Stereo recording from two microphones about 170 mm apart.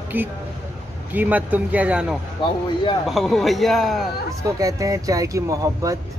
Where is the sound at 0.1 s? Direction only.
10° right (ahead or behind).